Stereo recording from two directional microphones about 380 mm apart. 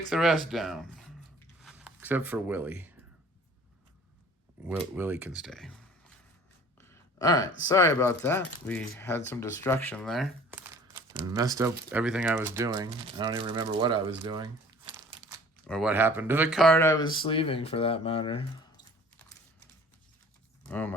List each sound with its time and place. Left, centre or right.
0.1 s speech: centre
4.6 s speech: centre
6.7 s a sound: centre
7.7 s speech: centre
15.6 s speech: centre
20.7 s speech: centre